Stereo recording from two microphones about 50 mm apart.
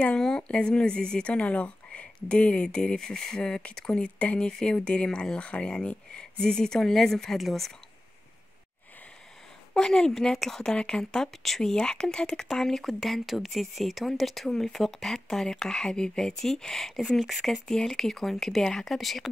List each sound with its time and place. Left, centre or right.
0.4 s a woman's voice: left; by 7.7 s centre
9.8 s a woman's voice: centre